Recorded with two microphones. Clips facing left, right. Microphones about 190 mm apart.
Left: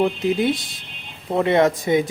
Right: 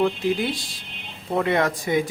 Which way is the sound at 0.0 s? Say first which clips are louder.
Left 3 dB; 25° left (ahead or behind).